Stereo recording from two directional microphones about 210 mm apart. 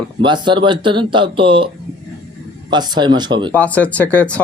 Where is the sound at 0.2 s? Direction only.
20° right (ahead or behind).